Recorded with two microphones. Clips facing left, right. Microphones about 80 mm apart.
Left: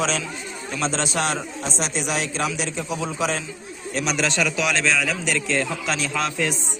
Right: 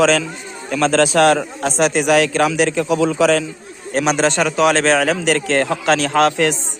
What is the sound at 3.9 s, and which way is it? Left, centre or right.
A man's voice, right.